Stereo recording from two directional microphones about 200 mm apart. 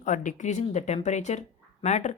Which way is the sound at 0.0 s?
40° left (ahead or behind).